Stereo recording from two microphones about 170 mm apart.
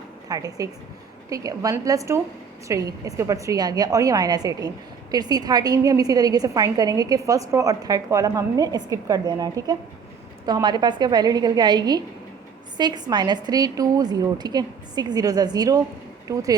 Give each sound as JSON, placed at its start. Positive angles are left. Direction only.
{"t": 0.3, "sound": "a woman's voice", "side_deg": -20}